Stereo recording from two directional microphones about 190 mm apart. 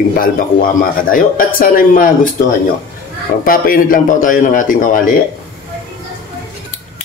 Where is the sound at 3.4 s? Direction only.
50° left (ahead or behind).